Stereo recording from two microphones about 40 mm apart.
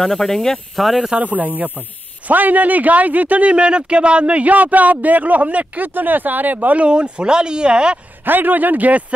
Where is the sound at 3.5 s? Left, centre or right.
Right.